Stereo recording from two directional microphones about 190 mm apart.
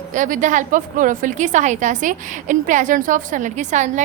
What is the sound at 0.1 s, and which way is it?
A woman's voice, 40° right (ahead or behind).